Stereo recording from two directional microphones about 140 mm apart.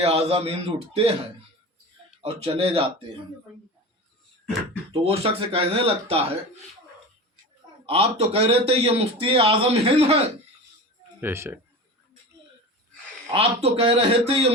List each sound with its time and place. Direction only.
0.0 s a man's voice: 45° right (ahead or behind)
2.2 s speech: 40° right (ahead or behind)
4.9 s a man's voice: 45° right (ahead or behind)
7.9 s a man's voice: 45° right (ahead or behind)
11.2 s speech: 15° right (ahead or behind)
13.3 s a man's voice: 45° right (ahead or behind)